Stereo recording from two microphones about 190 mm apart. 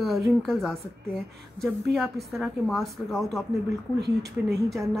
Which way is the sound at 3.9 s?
60° right (ahead or behind).